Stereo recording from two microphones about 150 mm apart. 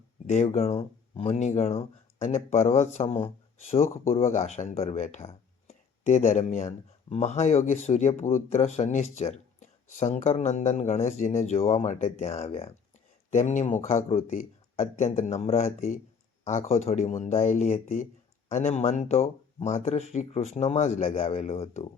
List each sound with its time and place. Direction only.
0.3 s speech: 45° left (ahead or behind)
13.8 s speech: 40° left (ahead or behind)
15.1 s speech: 60° left (ahead or behind)
15.4 s speech: 40° left (ahead or behind)